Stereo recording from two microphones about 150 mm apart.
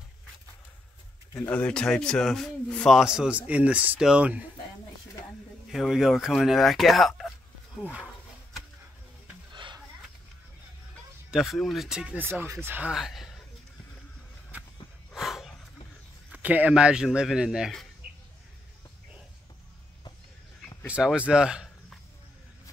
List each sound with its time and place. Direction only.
1.3 s speech: 20° left (ahead or behind)
1.6 s speech: 5° left (ahead or behind)
5.7 s speech: centre (ahead or behind)
9.5 s a sound: 30° right (ahead or behind)
11.2 s speech: centre (ahead or behind)
12.9 s speech: centre (ahead or behind)
14.5 s walk: 10° right (ahead or behind)
15.1 s a sound: centre (ahead or behind)
16.3 s speech: 10° right (ahead or behind)
20.8 s speech: 5° right (ahead or behind)